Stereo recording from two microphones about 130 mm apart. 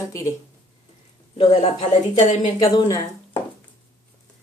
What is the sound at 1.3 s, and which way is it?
A woman's voice, 60° left (ahead or behind).